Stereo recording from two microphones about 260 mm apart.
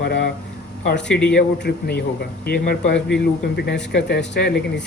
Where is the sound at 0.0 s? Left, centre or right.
Left.